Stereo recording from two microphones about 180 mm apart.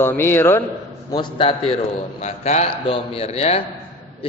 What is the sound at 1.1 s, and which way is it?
A man's voice, 25° left (ahead or behind).